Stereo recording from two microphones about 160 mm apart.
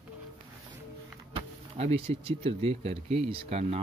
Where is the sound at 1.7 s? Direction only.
40° right (ahead or behind).